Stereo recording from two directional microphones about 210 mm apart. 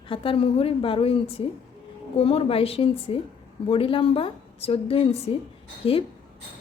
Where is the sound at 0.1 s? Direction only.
25° left (ahead or behind).